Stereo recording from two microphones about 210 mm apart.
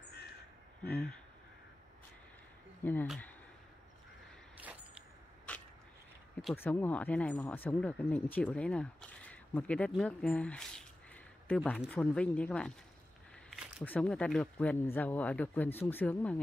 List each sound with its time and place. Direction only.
2.8 s speech: 10° left (ahead or behind)
5.5 s a sound: 5° left (ahead or behind)
6.4 s speech: 10° left (ahead or behind)
13.8 s speech: 5° left (ahead or behind)